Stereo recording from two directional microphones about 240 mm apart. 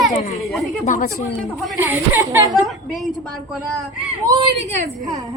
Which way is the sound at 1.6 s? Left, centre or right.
Centre.